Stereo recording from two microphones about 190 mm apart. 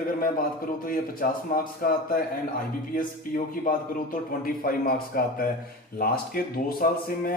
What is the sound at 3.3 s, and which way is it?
Speech, 50° left (ahead or behind).